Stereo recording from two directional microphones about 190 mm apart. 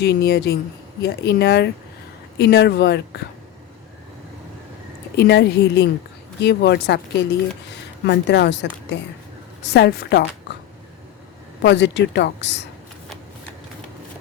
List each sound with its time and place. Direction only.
0.0 s speech: 60° left (ahead or behind)
5.1 s speech: 60° left (ahead or behind)
11.6 s a woman's voice: 70° left (ahead or behind)